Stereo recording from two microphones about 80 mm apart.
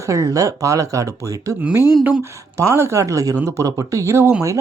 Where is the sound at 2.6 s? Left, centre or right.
Right.